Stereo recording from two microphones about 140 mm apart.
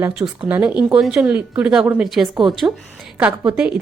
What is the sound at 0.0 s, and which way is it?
A woman's voice, 10° right (ahead or behind).